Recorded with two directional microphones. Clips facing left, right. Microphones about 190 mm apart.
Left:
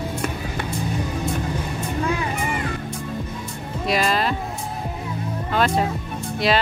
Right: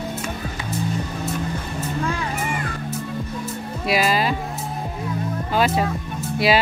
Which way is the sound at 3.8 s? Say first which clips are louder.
Right 1 dB; 5° right (ahead or behind).